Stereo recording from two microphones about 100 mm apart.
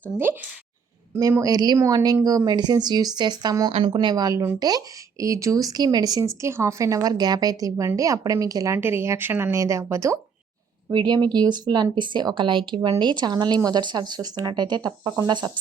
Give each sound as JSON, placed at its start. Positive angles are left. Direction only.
{"t": 1.1, "sound": "speech", "side_deg": -30}
{"t": 8.8, "sound": "speech", "side_deg": -25}
{"t": 10.9, "sound": "speech", "side_deg": -45}